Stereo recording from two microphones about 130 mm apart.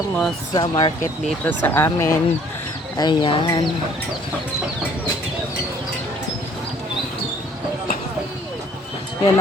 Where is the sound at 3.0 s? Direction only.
40° left (ahead or behind).